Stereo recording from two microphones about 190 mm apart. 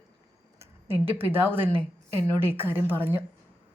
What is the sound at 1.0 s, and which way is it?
A woman's voice, 10° right (ahead or behind).